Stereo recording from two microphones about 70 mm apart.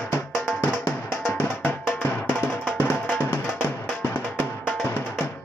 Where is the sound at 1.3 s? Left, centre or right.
Left.